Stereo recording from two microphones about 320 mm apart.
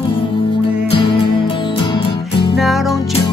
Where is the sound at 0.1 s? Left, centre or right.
Centre.